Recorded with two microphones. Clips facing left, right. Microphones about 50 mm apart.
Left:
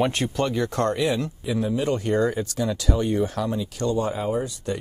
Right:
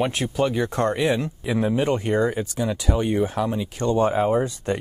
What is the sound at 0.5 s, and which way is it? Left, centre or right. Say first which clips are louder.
Speech: right 1 dB; centre.